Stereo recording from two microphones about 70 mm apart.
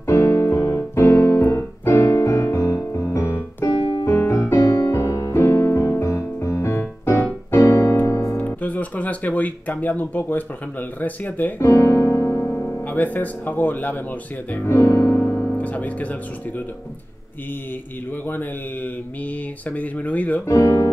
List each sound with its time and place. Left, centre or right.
0.0 s piano: left
2.8 s music: left
3.1 s keyboard: left
4.0 s piano: left
7.5 s keyboard: left
7.9 s piano: left
8.4 s speech: left
11.6 s music: left
12.8 s speech: left
14.8 s music: left
15.5 s speech: left
18.1 s speech: left
20.4 s speech: left